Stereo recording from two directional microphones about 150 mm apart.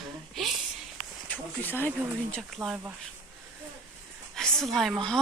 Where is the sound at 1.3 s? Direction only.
10° left (ahead or behind).